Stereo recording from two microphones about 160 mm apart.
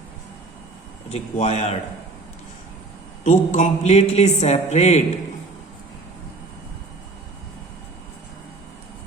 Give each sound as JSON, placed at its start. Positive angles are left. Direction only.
{"t": 1.1, "sound": "speech", "side_deg": 40}
{"t": 3.2, "sound": "a woman's voice", "side_deg": 50}